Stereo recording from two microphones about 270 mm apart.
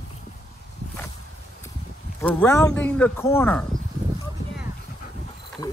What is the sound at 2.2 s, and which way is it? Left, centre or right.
Speech, centre.